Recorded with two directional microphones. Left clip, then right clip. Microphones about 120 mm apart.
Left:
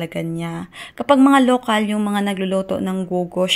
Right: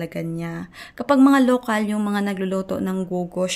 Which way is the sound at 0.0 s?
20° left (ahead or behind).